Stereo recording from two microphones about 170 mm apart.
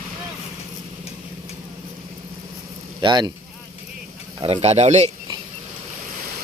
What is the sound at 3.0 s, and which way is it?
Speech, 25° right (ahead or behind).